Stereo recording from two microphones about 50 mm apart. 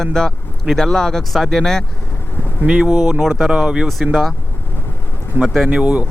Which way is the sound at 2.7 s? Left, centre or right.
Centre.